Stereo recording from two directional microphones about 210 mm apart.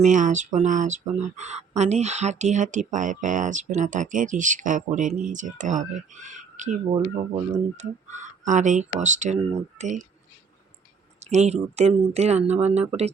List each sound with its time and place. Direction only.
0.0 s speech: 35° right (ahead or behind)
11.2 s speech: 30° right (ahead or behind)